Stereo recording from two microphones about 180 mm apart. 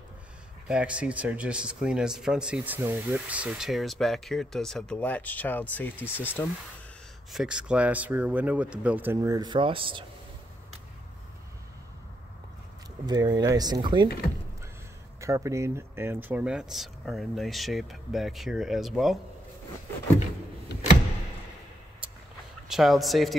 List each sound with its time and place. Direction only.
0.7 s speech: 5° right (ahead or behind); by 6.4 s 10° left (ahead or behind)
7.3 s speech: 5° right (ahead or behind); by 10.0 s 30° right (ahead or behind)
13.0 s speech: 20° right (ahead or behind)
15.1 s speech: 15° right (ahead or behind); by 19.1 s centre (ahead or behind)
22.7 s speech: centre (ahead or behind)